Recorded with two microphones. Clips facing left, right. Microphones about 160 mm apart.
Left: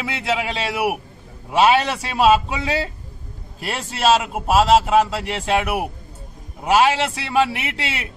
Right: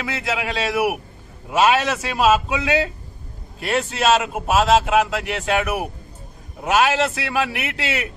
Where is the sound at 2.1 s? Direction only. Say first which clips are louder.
Left 2 dB; centre (ahead or behind).